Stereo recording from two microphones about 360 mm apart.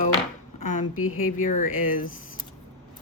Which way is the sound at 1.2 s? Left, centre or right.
Left.